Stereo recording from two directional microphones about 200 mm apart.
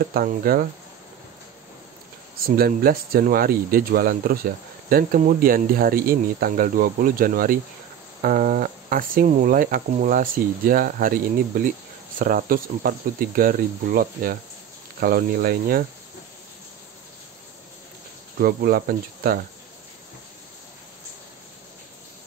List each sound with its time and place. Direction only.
0.0 s speech: 50° right (ahead or behind)
2.4 s speech: 50° right (ahead or behind)
18.4 s speech: 50° right (ahead or behind)